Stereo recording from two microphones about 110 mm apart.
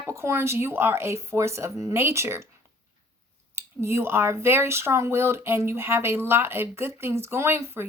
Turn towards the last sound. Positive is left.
turn(degrees=-25)  # may be behind; listen again after turning